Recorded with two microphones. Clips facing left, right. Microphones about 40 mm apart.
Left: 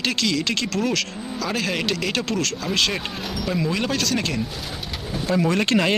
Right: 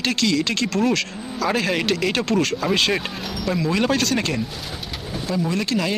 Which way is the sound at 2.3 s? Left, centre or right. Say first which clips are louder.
Right 4 dB; centre.